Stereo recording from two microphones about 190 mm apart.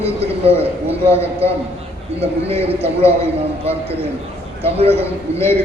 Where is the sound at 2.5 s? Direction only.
30° right (ahead or behind).